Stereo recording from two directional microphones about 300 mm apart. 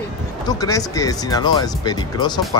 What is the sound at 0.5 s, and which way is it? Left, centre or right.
Speech, centre.